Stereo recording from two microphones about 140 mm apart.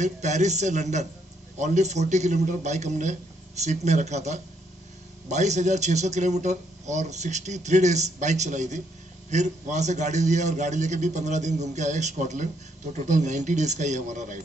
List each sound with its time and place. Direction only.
0.0 s a man's voice: 55° right (ahead or behind)